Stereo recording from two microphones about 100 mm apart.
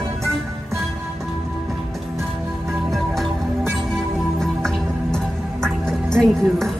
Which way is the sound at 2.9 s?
5° left (ahead or behind).